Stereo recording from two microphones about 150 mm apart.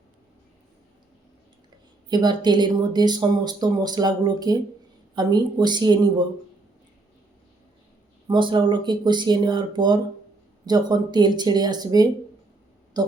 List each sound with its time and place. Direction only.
2.0 s speech: 30° right (ahead or behind)
8.3 s speech: 30° right (ahead or behind)